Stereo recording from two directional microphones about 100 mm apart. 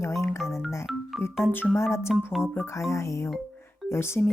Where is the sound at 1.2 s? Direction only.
25° left (ahead or behind).